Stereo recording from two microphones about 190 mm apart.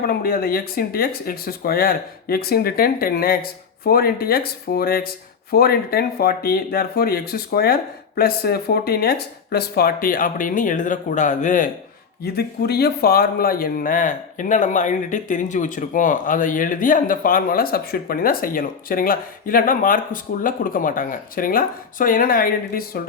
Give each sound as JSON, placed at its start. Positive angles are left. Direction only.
{"t": 0.1, "sound": "speech", "side_deg": 50}
{"t": 12.2, "sound": "speech", "side_deg": 55}